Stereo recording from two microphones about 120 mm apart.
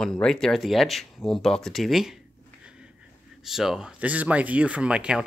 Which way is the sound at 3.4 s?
5° right (ahead or behind).